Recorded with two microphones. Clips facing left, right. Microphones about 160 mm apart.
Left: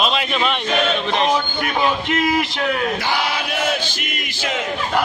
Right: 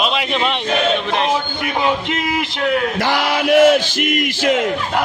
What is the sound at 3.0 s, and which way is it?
Chant, 90° right.